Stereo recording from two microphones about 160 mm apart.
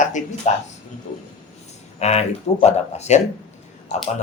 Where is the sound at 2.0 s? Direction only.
40° left (ahead or behind).